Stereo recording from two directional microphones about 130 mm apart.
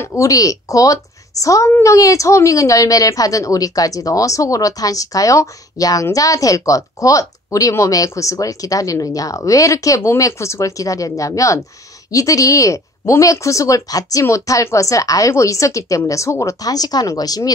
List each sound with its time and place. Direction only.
0.0 s a woman's voice: 25° left (ahead or behind)